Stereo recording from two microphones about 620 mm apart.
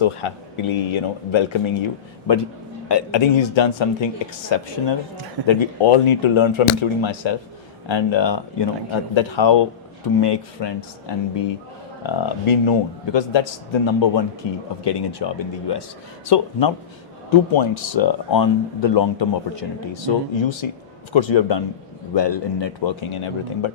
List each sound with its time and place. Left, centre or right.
0.0 s speech: left